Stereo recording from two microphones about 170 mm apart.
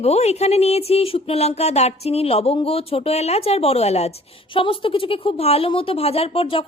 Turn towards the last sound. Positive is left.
turn(degrees=35)  # may be behind; listen again after turning